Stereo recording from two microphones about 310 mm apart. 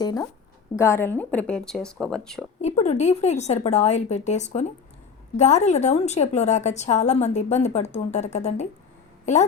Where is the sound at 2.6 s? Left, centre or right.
Left.